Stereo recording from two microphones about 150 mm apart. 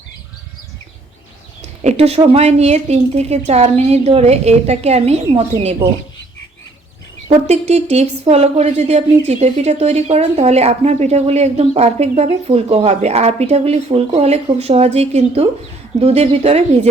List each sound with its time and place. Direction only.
1.8 s a woman's voice: 45° right (ahead or behind)
7.3 s a woman's voice: 45° right (ahead or behind)